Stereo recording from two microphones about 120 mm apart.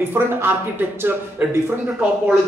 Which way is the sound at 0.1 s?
20° right (ahead or behind).